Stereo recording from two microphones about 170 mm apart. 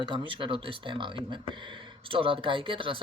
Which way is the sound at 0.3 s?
30° right (ahead or behind).